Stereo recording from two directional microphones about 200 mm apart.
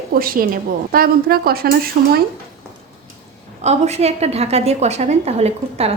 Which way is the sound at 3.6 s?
35° right (ahead or behind).